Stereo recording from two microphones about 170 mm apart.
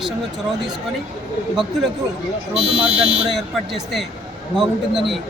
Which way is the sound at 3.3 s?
Centre (ahead or behind).